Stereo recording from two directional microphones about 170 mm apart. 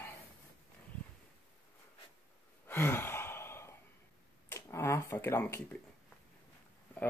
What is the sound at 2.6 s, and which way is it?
Sigh, 15° left (ahead or behind).